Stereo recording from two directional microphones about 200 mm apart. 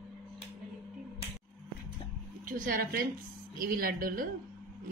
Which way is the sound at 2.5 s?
45° right (ahead or behind).